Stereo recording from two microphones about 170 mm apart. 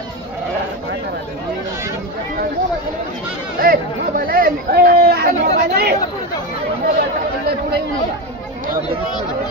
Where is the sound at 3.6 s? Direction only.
60° right (ahead or behind).